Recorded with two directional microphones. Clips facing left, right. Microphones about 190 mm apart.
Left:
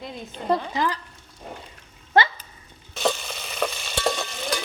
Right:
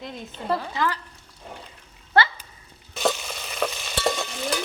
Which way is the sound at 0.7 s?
20° left (ahead or behind).